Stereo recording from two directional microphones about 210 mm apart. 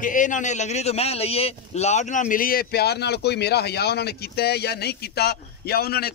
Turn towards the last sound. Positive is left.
turn(degrees=45)  # may be behind; listen again after turning